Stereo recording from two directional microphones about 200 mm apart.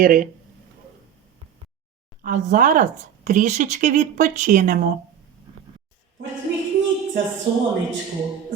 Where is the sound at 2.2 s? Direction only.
40° right (ahead or behind).